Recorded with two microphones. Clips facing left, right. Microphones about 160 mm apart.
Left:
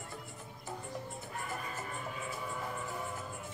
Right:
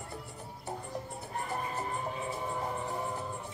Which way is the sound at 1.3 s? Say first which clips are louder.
Right 7 dB; 35° right (ahead or behind).